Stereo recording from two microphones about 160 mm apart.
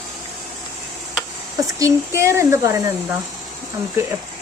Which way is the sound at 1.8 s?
15° right (ahead or behind).